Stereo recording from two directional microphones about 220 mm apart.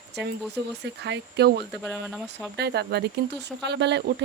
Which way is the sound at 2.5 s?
50° right (ahead or behind).